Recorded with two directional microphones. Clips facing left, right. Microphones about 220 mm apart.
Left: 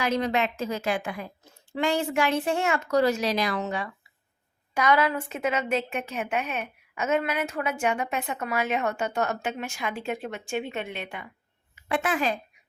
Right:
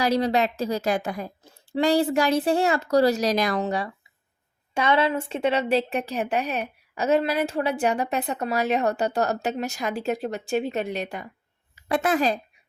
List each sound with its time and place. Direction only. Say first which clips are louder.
0.0 s a woman's voice: right 4 dB; 35° right (ahead or behind)